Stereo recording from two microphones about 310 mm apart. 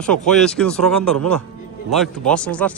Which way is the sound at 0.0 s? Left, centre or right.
Centre.